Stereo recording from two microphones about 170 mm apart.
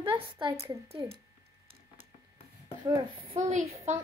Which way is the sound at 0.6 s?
15° right (ahead or behind).